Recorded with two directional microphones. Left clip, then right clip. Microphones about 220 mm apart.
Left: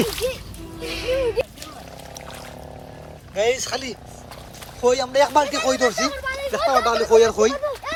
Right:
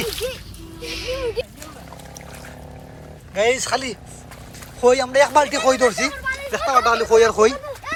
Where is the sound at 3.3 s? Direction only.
10° left (ahead or behind).